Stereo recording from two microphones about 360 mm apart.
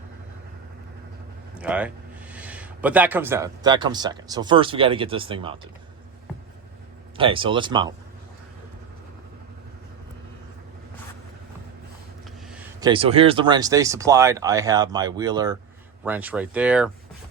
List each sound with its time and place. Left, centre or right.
1.5 s speech: centre
7.2 s speech: centre
12.5 s speech: centre